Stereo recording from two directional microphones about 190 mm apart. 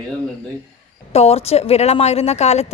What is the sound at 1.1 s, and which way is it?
A woman's voice, 30° left (ahead or behind).